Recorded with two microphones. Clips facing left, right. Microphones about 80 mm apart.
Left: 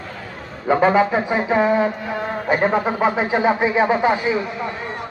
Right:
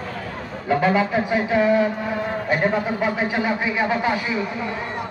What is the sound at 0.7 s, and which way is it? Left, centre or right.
A man's voice, left.